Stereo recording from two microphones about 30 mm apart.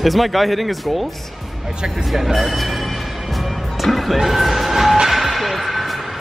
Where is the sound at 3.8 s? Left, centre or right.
Centre.